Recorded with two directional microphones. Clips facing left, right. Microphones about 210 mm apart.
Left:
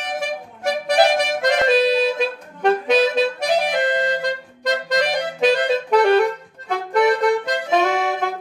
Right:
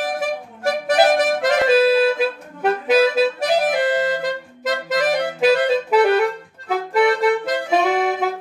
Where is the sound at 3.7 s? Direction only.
5° right (ahead or behind).